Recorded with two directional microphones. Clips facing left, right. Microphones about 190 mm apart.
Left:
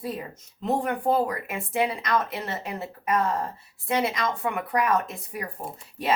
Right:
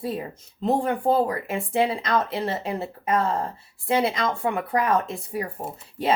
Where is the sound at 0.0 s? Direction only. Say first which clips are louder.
Right 3 dB; 30° right (ahead or behind).